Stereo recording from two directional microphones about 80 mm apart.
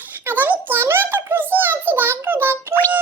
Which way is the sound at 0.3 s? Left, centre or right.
Right.